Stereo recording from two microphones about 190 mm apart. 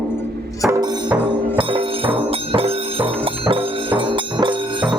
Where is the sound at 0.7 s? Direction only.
15° right (ahead or behind).